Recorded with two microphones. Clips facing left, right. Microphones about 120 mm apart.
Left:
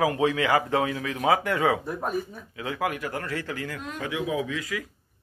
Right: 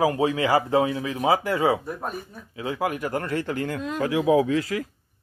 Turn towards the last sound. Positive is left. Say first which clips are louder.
# right 8 dB
turn(degrees=-30)  # may be behind; listen again after turning